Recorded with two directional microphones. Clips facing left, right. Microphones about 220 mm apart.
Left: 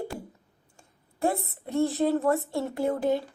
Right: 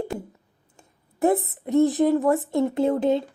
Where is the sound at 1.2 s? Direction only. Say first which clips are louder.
Right 7 dB; 20° right (ahead or behind).